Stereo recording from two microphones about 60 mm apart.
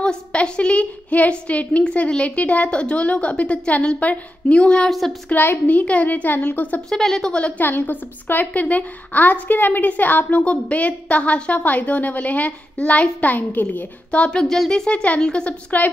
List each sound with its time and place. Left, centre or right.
0.0 s a woman's voice: centre
4.8 s speech: centre
5.3 s a woman's voice: left
6.9 s speech: centre
7.3 s a woman's voice: left
14.1 s a woman's voice: centre